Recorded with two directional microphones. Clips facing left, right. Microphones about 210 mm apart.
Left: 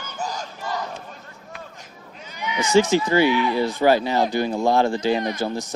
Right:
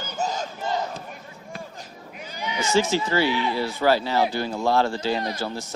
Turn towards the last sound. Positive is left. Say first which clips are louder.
# left 4 dB
turn(degrees=15)  # may be behind; listen again after turning